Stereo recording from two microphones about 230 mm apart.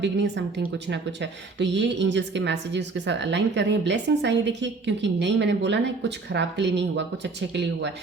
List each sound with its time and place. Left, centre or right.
0.0 s a woman's voice: right